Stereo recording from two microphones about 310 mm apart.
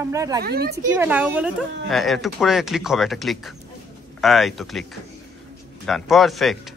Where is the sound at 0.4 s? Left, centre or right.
Right.